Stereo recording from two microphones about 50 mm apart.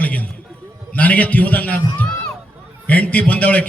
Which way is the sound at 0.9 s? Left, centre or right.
Left.